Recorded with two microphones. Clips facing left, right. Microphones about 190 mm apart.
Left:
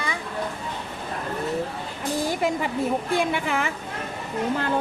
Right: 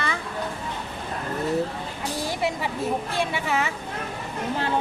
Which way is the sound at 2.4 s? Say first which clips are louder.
Left 2 dB; 45° left (ahead or behind).